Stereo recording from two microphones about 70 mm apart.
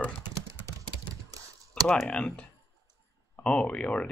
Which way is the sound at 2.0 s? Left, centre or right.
Centre.